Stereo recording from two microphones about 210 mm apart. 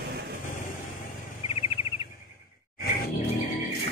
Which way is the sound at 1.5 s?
30° left (ahead or behind).